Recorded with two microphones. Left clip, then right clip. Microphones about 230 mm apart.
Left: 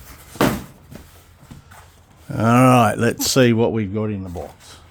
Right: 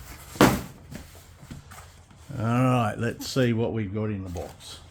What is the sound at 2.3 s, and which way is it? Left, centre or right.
Speech, left.